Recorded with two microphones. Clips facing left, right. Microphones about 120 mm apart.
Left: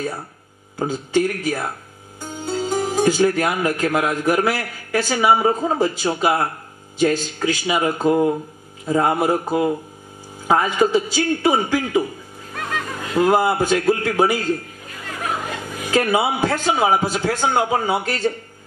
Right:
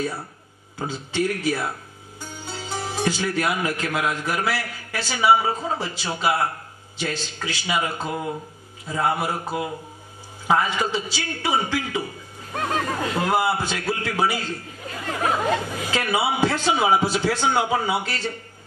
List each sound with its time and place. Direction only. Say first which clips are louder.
0.7 s a man's voice: left 6 dB; 45° left (ahead or behind)
12.5 s a sound: right 2 dB; 35° right (ahead or behind)
13.2 s a man's voice: left 7 dB; 45° left (ahead or behind)
15.0 s chatter: right 4 dB; 45° right (ahead or behind)
15.9 s a man's voice: left 6 dB; 45° left (ahead or behind)